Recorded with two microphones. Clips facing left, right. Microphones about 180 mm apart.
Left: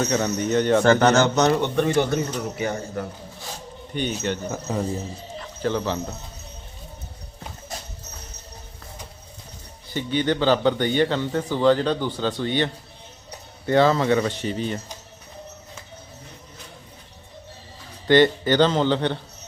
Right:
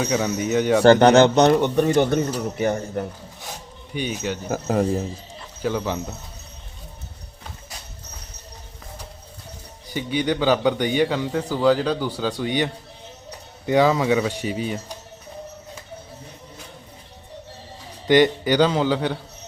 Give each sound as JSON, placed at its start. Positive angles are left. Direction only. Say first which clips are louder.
{"t": 0.0, "sound": "a man's voice", "louder": "even", "side_deg": -10}
{"t": 0.9, "sound": "a man's voice", "louder": "right 8 dB", "side_deg": -35}
{"t": 3.9, "sound": "a man's voice", "louder": "left 1 dB", "side_deg": -10}
{"t": 4.4, "sound": "speech", "louder": "right 5 dB", "side_deg": -85}
{"t": 5.6, "sound": "a man's voice", "louder": "even", "side_deg": -10}
{"t": 9.9, "sound": "a man's voice", "louder": "even", "side_deg": -10}
{"t": 18.1, "sound": "a man's voice", "louder": "even", "side_deg": -15}